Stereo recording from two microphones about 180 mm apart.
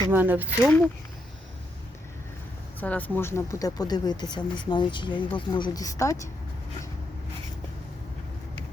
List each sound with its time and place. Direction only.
0.1 s speech: 10° right (ahead or behind)
0.6 s speech: 10° left (ahead or behind)
2.8 s speech: 10° left (ahead or behind)